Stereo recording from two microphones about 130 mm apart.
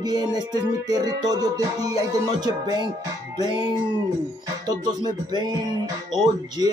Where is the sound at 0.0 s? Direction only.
30° right (ahead or behind).